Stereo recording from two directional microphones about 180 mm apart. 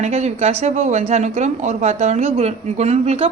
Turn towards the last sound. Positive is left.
turn(degrees=-35)  # may be behind; listen again after turning